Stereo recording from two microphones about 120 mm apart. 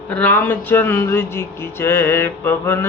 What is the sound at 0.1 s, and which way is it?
Speech, 15° left (ahead or behind).